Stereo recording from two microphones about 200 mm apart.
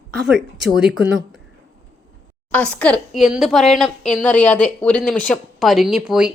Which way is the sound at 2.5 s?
5° left (ahead or behind).